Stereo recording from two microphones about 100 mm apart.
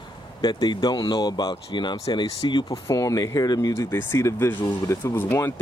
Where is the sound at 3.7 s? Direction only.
30° left (ahead or behind).